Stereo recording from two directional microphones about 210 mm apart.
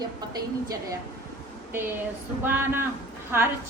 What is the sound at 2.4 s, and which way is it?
Speech, 10° right (ahead or behind).